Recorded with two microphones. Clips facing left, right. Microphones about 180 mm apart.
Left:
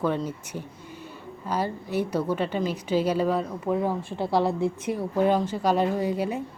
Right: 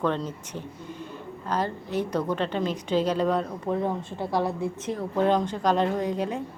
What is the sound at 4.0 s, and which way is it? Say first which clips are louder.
Speech: left 3 dB; 20° right (ahead or behind).